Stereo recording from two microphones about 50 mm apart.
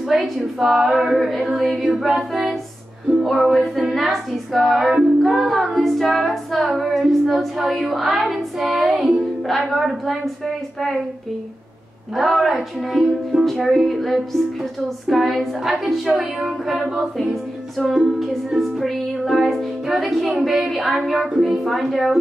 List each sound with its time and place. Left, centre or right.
0.1 s music: centre
12.2 s music: centre